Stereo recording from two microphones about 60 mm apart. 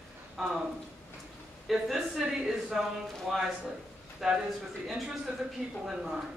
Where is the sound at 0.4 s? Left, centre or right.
Centre.